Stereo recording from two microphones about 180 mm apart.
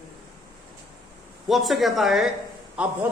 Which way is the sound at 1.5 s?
Centre (ahead or behind).